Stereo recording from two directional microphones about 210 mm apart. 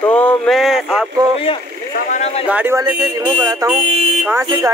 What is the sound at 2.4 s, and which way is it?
Speech, 10° right (ahead or behind).